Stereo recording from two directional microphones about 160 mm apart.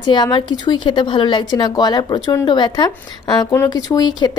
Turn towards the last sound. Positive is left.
turn(degrees=25)  # may be behind; listen again after turning